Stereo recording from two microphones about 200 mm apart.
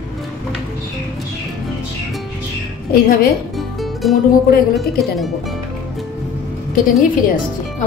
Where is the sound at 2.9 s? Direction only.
45° left (ahead or behind).